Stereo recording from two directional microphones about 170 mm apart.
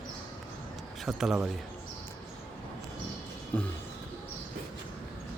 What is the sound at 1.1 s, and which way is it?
Speech, centre (ahead or behind).